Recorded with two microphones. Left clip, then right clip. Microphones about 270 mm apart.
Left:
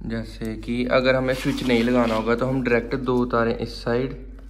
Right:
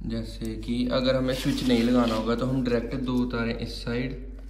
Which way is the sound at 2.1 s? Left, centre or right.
Centre.